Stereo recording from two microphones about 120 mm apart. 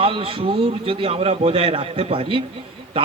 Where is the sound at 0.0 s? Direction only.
50° right (ahead or behind).